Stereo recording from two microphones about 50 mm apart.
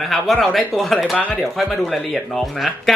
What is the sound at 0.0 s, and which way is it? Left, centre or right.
Speech, centre.